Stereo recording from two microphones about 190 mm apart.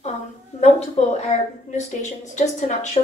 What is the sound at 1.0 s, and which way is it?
A woman's voice, 35° left (ahead or behind).